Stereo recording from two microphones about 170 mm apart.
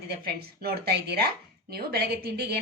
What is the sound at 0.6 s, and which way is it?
A woman's voice, 70° right (ahead or behind).